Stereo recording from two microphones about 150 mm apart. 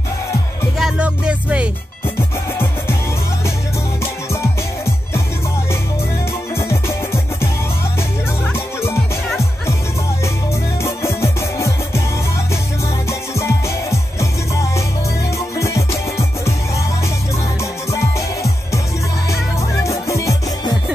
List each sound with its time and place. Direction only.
0.7 s music: 5° right (ahead or behind)
2.1 s music: 15° left (ahead or behind)
4.0 s music: 15° left (ahead or behind)
6.5 s music: 15° left (ahead or behind)
8.5 s music: 15° left (ahead or behind)
10.2 s music: 20° left (ahead or behind)
13.3 s music: 20° left (ahead or behind)
15.3 s music: 20° left (ahead or behind)
18.1 s music: 20° left (ahead or behind)
19.8 s music: 20° left (ahead or behind)